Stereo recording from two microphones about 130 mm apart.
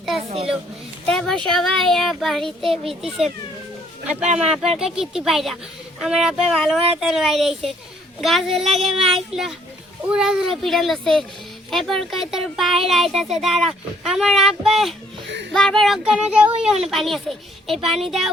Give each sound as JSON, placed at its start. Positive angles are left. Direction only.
{"t": 0.3, "sound": "a child's voice", "side_deg": -45}
{"t": 1.0, "sound": "speech", "side_deg": 5}
{"t": 4.4, "sound": "speech", "side_deg": -5}